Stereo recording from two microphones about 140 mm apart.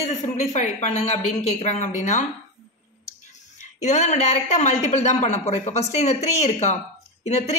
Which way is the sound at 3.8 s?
55° left (ahead or behind).